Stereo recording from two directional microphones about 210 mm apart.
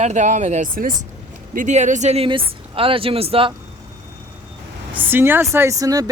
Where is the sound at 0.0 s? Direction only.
35° right (ahead or behind).